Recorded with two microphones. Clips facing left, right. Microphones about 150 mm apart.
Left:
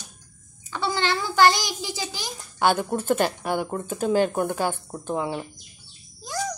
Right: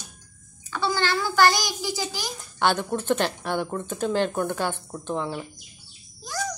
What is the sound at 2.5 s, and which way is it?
Speech, 5° left (ahead or behind).